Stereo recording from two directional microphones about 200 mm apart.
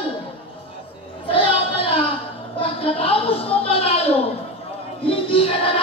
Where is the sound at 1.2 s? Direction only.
25° left (ahead or behind).